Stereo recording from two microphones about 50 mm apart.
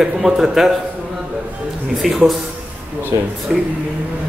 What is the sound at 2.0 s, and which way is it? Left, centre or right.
Speech, centre.